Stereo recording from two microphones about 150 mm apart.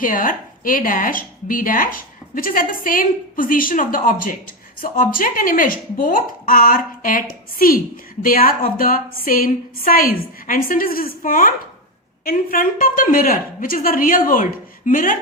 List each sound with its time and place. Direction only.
0.0 s a woman's voice: 65° left (ahead or behind)